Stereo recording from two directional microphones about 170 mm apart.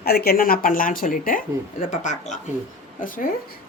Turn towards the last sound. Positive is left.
turn(degrees=55)  # may be behind; listen again after turning